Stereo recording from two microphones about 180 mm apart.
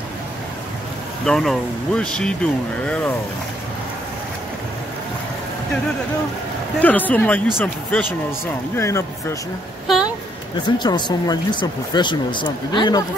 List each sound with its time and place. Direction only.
1.2 s speech: centre (ahead or behind)
6.8 s speech: 10° left (ahead or behind)
9.8 s a sound: 5° right (ahead or behind)
10.8 s speech: 25° left (ahead or behind)